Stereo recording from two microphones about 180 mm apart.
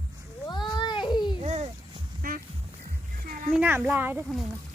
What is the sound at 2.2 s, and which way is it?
Duck, 50° right (ahead or behind).